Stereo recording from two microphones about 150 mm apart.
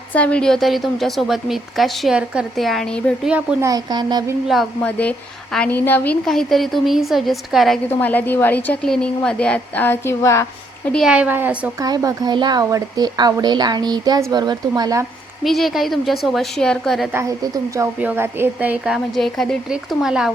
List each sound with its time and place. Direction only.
0.1 s a woman's voice: 10° left (ahead or behind)
3.2 s a woman's voice: 10° right (ahead or behind)
3.6 s speech: 25° right (ahead or behind)
4.4 s a woman's voice: centre (ahead or behind)
7.9 s a woman's voice: 10° left (ahead or behind)
10.9 s a woman's voice: 5° right (ahead or behind)
11.8 s speech: 25° right (ahead or behind)
15.4 s a woman's voice: centre (ahead or behind)
17.1 s a woman's voice: 20° right (ahead or behind); by 20.3 s 5° right (ahead or behind)